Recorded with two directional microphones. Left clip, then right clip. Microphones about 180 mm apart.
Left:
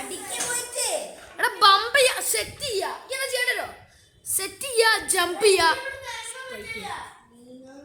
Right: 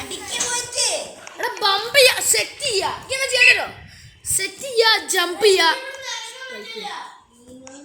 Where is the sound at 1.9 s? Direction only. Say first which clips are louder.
Right 6 dB; 5° right (ahead or behind).